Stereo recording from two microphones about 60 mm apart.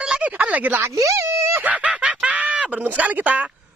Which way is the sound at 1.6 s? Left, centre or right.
Right.